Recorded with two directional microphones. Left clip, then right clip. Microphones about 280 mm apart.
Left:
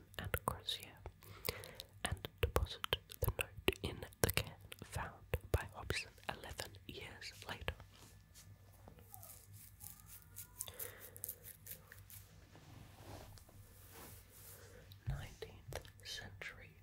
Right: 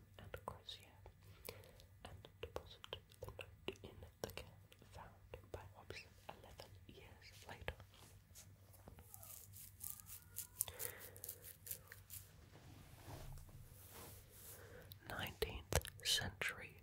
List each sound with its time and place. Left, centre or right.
0.1 s whispering: left
7.4 s whispering: centre
9.8 s a sound: centre
11.1 s scissors: centre
14.9 s whispering: right